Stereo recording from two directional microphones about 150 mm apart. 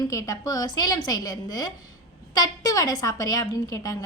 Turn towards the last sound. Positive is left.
turn(degrees=25)  # may be behind; listen again after turning